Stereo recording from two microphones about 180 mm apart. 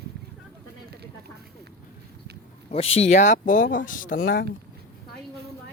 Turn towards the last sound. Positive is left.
turn(degrees=55)  # may be behind; listen again after turning